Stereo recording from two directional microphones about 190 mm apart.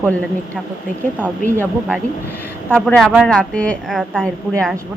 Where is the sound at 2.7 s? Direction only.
5° left (ahead or behind).